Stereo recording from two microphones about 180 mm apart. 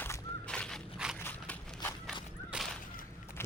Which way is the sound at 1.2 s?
10° left (ahead or behind).